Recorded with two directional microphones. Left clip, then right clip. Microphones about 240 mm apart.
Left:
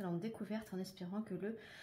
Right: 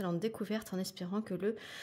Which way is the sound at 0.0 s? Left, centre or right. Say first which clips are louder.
Right 8 dB; right.